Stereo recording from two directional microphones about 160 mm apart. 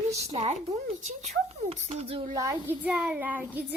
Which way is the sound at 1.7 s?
40° right (ahead or behind).